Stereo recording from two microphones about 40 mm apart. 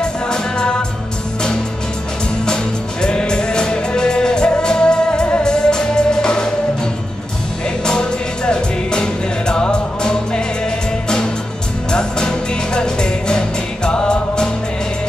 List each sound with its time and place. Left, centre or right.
0.0 s music: left
2.4 s music: left
7.8 s music: left
11.9 s music: centre